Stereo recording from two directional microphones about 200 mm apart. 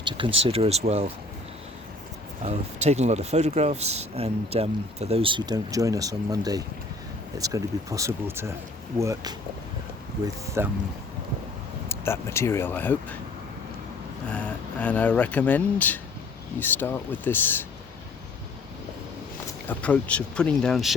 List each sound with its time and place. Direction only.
0.4 s speech: 30° right (ahead or behind)
2.4 s speech: 35° right (ahead or behind); by 10.7 s 15° right (ahead or behind)
11.9 s speech: 15° left (ahead or behind)
14.3 s speech: 5° left (ahead or behind)
19.5 s speech: 10° left (ahead or behind)